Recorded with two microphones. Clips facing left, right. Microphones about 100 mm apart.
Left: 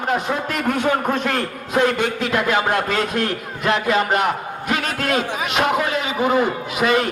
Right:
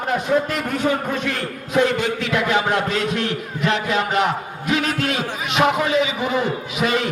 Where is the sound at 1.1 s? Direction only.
40° left (ahead or behind).